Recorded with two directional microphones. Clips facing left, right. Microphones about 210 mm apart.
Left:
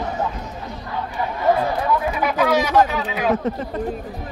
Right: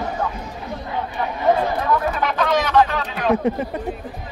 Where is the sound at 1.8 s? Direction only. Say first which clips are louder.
Even; 10° left (ahead or behind).